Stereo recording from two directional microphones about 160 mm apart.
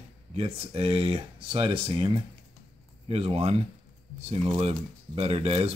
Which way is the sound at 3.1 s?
40° right (ahead or behind).